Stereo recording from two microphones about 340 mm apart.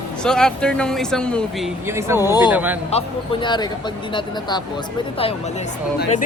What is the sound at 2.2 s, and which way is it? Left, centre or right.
Speech, centre.